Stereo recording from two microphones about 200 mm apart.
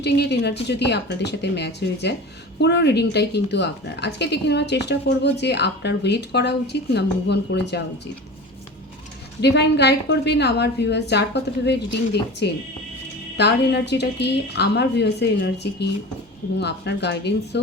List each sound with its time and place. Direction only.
0.0 s a woman's voice: 55° left (ahead or behind)
9.4 s a woman's voice: 55° left (ahead or behind)